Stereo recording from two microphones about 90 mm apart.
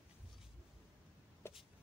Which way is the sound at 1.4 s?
30° left (ahead or behind).